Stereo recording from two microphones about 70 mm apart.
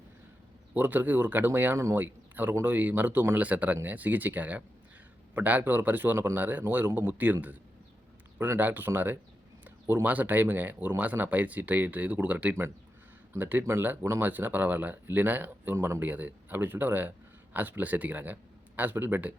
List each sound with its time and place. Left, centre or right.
0.7 s speech: right
6.1 s speech: right
6.4 s speech: right
8.4 s speech: right
15.7 s speech: right
16.0 s speech: right